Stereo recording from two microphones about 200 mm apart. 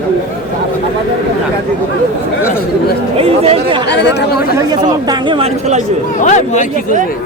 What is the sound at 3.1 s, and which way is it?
Speech, 30° right (ahead or behind).